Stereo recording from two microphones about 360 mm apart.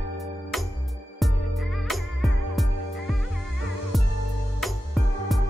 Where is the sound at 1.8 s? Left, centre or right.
Centre.